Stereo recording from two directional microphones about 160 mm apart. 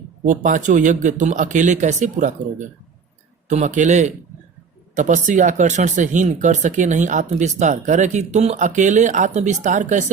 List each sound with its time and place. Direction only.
0.3 s speech: 55° right (ahead or behind)